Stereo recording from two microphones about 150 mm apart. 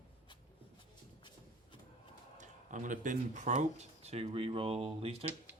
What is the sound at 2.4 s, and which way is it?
Speech, 60° right (ahead or behind).